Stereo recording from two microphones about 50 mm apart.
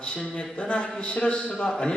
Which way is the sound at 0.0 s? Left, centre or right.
Centre.